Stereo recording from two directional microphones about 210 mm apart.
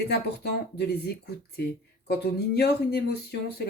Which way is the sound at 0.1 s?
50° left (ahead or behind).